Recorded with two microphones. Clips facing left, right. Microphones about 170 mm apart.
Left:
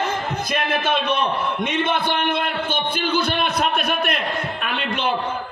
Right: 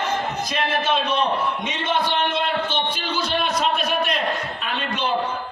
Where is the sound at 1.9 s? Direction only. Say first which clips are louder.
Left 1 dB; 55° left (ahead or behind).